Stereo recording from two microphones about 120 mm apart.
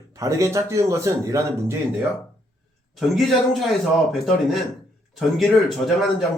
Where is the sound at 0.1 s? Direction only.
25° right (ahead or behind).